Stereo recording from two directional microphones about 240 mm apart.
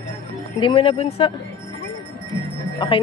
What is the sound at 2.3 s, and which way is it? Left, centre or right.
Music, left.